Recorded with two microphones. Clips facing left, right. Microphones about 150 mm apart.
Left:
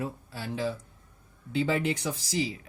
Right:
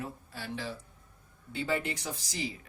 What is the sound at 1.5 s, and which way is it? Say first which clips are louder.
Speech: left 5 dB; 90° left.